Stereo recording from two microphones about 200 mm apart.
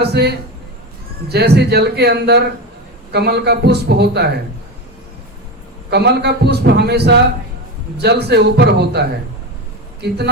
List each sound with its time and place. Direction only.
0.0 s a man's voice: 55° right (ahead or behind)
5.9 s a man's voice: 55° right (ahead or behind)